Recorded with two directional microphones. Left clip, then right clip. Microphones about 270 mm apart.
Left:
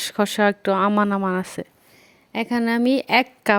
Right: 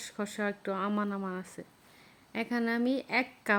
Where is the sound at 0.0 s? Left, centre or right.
Left.